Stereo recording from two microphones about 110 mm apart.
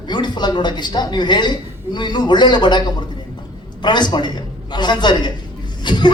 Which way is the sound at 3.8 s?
40° left (ahead or behind).